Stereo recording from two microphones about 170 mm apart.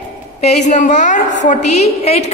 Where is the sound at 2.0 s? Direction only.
35° left (ahead or behind).